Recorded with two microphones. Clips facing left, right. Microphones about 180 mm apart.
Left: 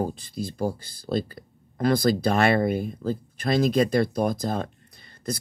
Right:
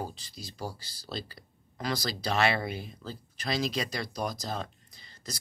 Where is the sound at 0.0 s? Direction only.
55° left (ahead or behind).